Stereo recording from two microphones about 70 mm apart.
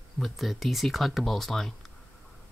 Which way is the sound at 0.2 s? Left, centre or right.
Centre.